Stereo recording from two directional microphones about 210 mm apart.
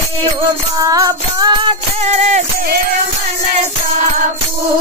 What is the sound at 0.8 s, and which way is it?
Music, 15° right (ahead or behind).